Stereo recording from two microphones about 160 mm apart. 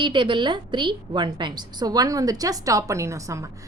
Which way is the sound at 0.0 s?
30° right (ahead or behind).